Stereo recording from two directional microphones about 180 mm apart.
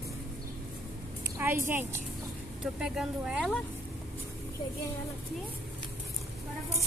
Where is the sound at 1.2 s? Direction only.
10° right (ahead or behind).